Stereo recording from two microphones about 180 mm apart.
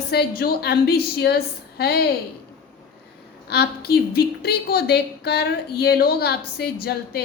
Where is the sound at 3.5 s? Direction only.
60° left (ahead or behind).